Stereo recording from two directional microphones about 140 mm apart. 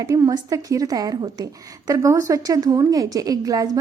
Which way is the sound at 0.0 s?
25° right (ahead or behind).